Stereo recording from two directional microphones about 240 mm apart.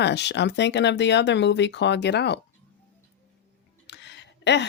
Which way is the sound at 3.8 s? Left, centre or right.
Left.